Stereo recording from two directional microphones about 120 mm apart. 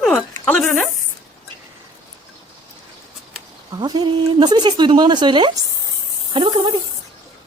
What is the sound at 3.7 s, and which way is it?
Speech, 35° right (ahead or behind).